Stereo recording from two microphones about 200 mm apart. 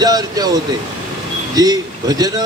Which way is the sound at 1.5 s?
20° right (ahead or behind).